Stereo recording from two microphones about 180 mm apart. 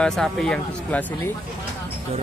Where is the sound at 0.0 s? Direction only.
Centre (ahead or behind).